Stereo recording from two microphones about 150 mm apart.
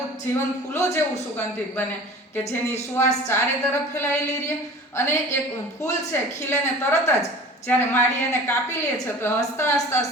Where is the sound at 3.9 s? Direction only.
15° left (ahead or behind).